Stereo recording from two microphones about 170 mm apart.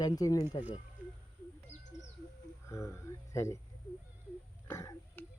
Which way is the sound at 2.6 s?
15° left (ahead or behind).